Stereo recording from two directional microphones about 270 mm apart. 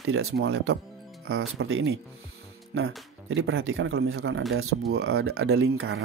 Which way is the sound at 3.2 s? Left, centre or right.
Right.